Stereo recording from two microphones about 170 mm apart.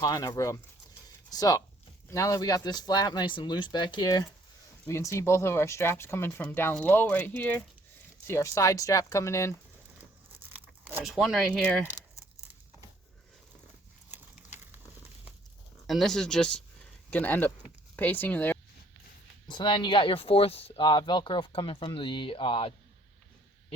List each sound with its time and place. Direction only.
0.0 s speech: 20° left (ahead or behind)
10.5 s speech: 10° right (ahead or behind)
14.1 s a sound: 10° right (ahead or behind)
15.9 s speech: centre (ahead or behind)
19.5 s speech: 25° left (ahead or behind)